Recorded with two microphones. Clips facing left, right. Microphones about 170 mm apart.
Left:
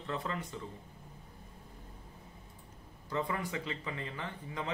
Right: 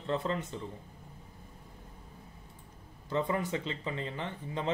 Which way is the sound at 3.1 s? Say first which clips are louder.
Right 4 dB; 25° right (ahead or behind).